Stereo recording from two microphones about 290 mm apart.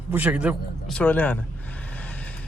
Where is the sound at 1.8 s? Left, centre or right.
Centre.